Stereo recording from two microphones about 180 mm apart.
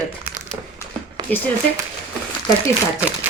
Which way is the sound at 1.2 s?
20° right (ahead or behind).